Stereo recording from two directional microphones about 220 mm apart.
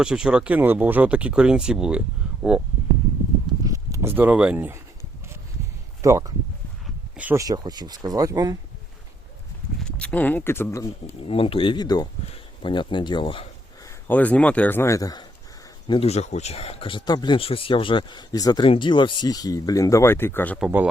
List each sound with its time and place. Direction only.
0.0 s speech: 5° right (ahead or behind)
3.6 s speech: 15° right (ahead or behind)
6.0 s speech: 15° right (ahead or behind)
9.8 s speech: 5° left (ahead or behind)
11.2 s speech: 25° left (ahead or behind)
14.1 s speech: 5° left (ahead or behind)
15.9 s speech: 25° left (ahead or behind); by 20.6 s 10° left (ahead or behind)
20.6 s speech: 5° right (ahead or behind)